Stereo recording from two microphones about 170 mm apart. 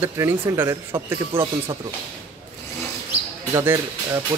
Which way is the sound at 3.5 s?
15° right (ahead or behind).